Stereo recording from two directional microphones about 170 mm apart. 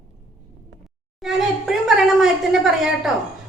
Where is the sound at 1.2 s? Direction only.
Centre (ahead or behind).